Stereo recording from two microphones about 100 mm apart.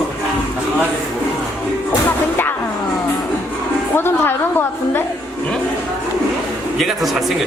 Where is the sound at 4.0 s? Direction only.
20° left (ahead or behind).